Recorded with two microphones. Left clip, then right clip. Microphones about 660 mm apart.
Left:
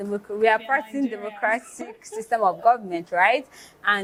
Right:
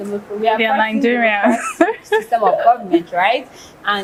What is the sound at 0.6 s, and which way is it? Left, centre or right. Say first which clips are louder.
Speech: right 10 dB; right.